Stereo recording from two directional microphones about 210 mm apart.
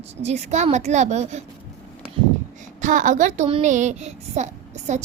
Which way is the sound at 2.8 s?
35° right (ahead or behind).